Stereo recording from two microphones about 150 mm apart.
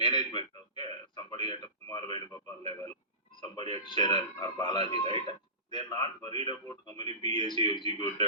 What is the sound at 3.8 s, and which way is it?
A man's voice, 30° left (ahead or behind).